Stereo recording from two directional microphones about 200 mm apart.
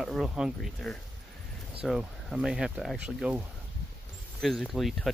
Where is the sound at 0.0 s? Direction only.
Centre (ahead or behind).